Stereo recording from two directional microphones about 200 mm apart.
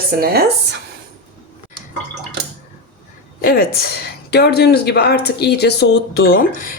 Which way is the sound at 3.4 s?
45° left (ahead or behind).